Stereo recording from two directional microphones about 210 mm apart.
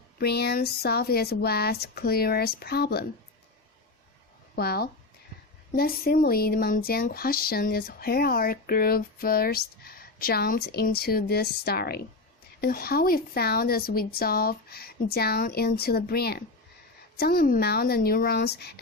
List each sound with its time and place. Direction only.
0.2 s speech: 50° left (ahead or behind)
4.5 s speech: 50° left (ahead or behind)